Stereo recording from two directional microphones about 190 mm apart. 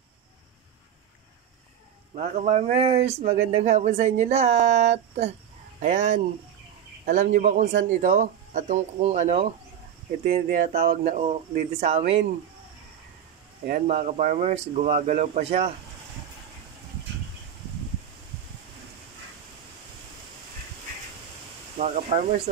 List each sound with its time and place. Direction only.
2.1 s speech: 35° right (ahead or behind)
10.2 s speech: 50° right (ahead or behind); by 12.2 s 35° right (ahead or behind)
13.8 s speech: 40° right (ahead or behind)
21.7 s speech: 35° right (ahead or behind)